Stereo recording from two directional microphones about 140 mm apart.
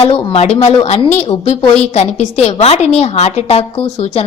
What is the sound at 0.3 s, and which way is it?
A woman's voice, 50° left (ahead or behind).